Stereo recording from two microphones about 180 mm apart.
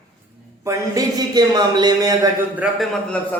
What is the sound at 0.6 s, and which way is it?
A man's voice, 20° right (ahead or behind).